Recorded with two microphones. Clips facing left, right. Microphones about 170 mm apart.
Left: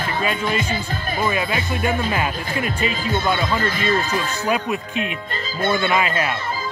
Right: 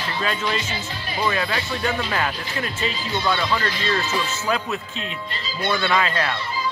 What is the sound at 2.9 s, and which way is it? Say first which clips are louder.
Speech: left 3 dB; 50° left (ahead or behind).